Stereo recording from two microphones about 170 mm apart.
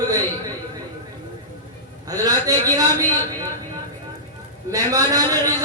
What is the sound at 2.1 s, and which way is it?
Speech, 20° right (ahead or behind).